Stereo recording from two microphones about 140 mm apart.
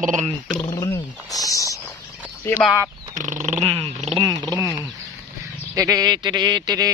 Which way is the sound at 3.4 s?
45° right (ahead or behind).